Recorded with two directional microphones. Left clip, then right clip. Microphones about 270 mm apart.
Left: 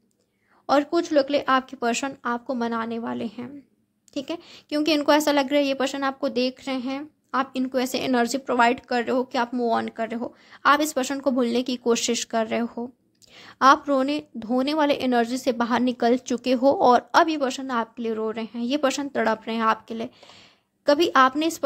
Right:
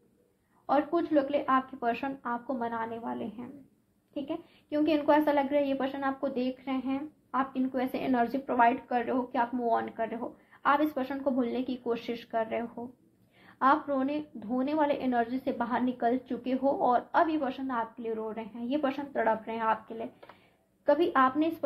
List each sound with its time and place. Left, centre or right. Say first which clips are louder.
0.7 s a woman's voice: left 6 dB; left